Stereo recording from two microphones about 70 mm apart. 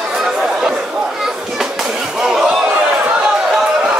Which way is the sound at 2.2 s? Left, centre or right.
Centre.